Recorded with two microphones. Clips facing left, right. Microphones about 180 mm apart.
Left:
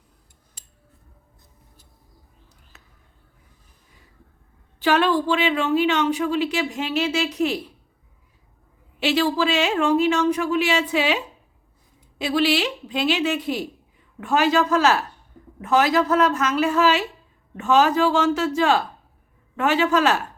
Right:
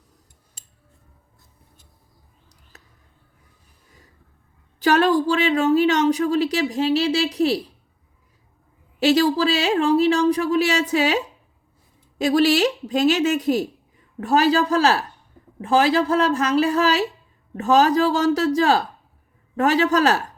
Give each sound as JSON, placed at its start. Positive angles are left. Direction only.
{"t": 2.7, "sound": "a sound", "side_deg": -40}
{"t": 4.8, "sound": "speech", "side_deg": -40}
{"t": 9.0, "sound": "speech", "side_deg": -40}
{"t": 12.2, "sound": "a woman's voice", "side_deg": -45}